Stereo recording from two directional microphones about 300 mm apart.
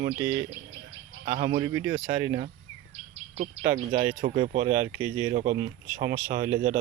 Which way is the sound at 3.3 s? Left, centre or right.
Right.